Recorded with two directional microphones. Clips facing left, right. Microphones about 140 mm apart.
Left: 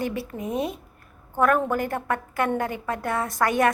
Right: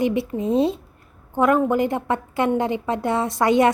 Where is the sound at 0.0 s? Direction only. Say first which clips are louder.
Right 7 dB; 20° right (ahead or behind).